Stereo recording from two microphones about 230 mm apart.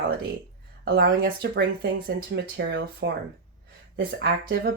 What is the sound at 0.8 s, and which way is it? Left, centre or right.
A woman's voice, right.